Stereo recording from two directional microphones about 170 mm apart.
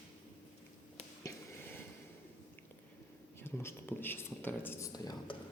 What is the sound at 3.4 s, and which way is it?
Speech, 15° left (ahead or behind).